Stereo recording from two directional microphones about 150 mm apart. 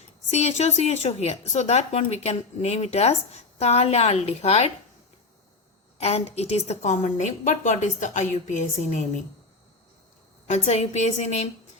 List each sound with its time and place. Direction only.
0.3 s a woman's voice: 45° left (ahead or behind)
6.0 s a woman's voice: 45° left (ahead or behind)
10.7 s a woman's voice: 50° left (ahead or behind)